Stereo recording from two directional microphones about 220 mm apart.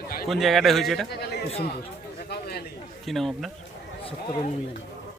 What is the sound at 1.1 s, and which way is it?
Speech, 45° left (ahead or behind).